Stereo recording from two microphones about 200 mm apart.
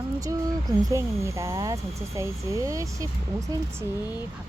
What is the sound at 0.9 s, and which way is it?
Speech, 15° right (ahead or behind).